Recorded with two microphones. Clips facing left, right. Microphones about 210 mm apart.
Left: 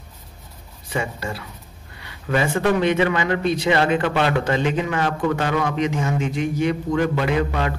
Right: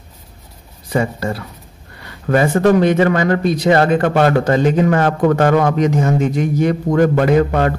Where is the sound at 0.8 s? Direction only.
40° right (ahead or behind).